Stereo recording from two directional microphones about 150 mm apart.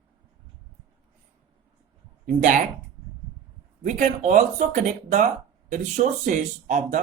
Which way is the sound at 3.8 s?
55° right (ahead or behind).